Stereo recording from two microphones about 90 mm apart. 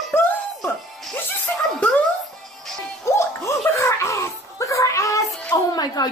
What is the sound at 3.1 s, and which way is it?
Gargling, 30° left (ahead or behind).